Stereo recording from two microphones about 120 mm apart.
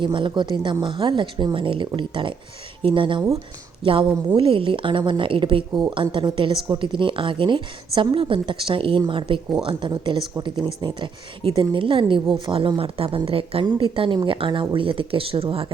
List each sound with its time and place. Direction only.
0.0 s speech: 40° right (ahead or behind)
4.4 s speech: 50° right (ahead or behind)